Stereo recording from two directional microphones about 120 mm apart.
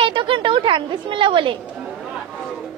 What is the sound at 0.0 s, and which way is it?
A woman's voice, 45° right (ahead or behind).